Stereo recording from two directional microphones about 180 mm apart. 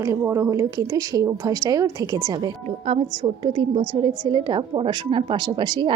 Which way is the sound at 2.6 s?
35° right (ahead or behind).